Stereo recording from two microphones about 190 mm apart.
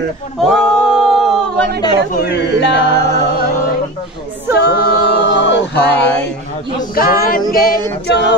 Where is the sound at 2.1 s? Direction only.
60° left (ahead or behind).